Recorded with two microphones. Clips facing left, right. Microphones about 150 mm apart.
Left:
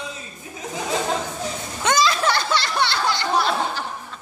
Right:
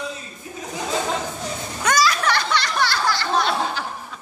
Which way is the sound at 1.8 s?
25° left (ahead or behind).